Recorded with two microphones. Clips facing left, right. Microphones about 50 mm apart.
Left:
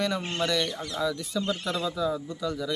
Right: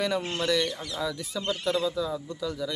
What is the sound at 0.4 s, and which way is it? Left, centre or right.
Speech, centre.